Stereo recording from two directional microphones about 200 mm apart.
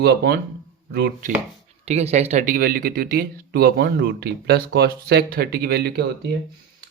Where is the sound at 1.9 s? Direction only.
35° right (ahead or behind); by 6.1 s 55° right (ahead or behind).